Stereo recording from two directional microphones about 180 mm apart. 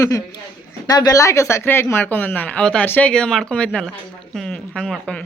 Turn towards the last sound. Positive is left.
turn(degrees=5)  # may be behind; listen again after turning